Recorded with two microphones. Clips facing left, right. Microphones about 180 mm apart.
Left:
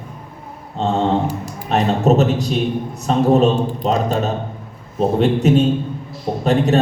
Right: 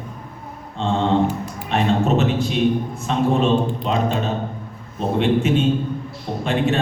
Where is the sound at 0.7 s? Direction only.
40° left (ahead or behind).